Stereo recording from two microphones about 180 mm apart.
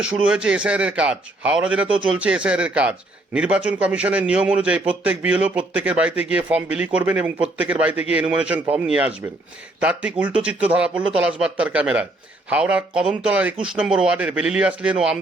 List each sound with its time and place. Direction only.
0.0 s a man's voice: 5° right (ahead or behind)